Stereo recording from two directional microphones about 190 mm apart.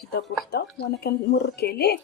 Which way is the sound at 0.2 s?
60° left (ahead or behind).